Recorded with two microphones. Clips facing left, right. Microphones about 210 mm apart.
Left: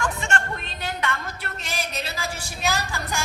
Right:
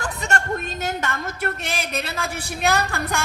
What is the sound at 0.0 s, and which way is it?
A woman's voice, 40° right (ahead or behind).